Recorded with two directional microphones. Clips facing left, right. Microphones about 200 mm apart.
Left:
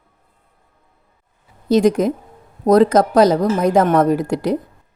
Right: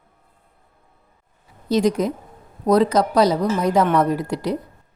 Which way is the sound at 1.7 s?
50° left (ahead or behind).